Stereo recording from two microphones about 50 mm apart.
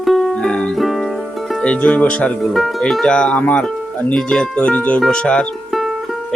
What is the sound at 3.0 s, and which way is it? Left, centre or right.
Speech, left.